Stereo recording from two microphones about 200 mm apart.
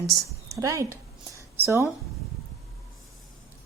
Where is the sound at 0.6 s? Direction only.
15° right (ahead or behind).